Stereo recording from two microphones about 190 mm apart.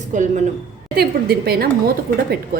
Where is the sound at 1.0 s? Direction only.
55° right (ahead or behind).